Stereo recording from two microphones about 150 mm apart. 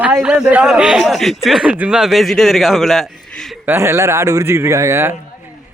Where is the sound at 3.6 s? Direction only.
15° right (ahead or behind).